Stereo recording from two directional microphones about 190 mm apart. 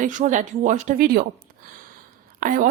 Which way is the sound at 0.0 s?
40° right (ahead or behind).